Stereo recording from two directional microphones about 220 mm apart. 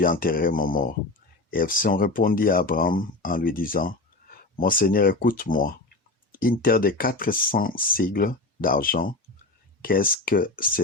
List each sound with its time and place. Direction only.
0.0 s speech: 40° left (ahead or behind)